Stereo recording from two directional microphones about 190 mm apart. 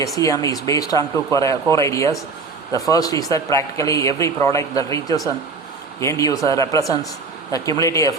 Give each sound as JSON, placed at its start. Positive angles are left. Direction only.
{"t": 0.2, "sound": "speech", "side_deg": 15}